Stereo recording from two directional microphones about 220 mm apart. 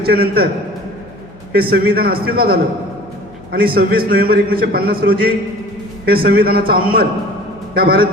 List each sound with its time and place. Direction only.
0.0 s a man's voice: 45° right (ahead or behind)
1.7 s a man's voice: 45° right (ahead or behind)